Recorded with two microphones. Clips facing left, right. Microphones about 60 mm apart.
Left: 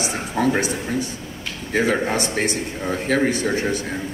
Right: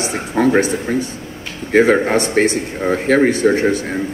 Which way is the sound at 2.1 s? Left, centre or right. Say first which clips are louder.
Right 7 dB; right.